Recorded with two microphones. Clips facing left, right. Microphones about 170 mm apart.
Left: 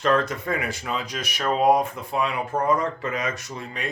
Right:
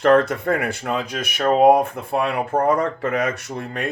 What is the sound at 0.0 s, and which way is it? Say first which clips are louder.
Speech: right 7 dB; 60° right (ahead or behind).